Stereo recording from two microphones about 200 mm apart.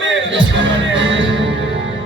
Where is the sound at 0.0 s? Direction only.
65° right (ahead or behind).